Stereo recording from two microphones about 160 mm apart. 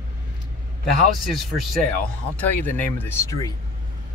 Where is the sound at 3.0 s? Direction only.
15° left (ahead or behind).